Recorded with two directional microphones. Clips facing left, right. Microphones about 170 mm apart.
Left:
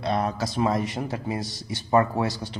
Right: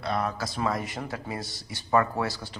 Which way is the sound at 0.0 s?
25° left (ahead or behind).